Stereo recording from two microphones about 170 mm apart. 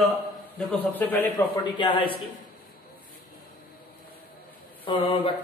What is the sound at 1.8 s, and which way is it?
Speech, 30° left (ahead or behind).